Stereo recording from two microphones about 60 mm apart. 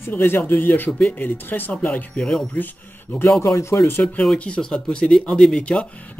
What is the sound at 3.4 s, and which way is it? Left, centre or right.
Speech, left.